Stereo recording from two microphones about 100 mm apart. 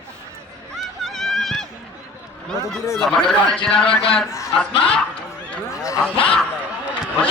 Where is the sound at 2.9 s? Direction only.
5° left (ahead or behind).